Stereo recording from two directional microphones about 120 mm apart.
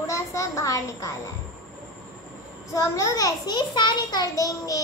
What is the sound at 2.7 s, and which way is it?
A child's voice, 25° left (ahead or behind).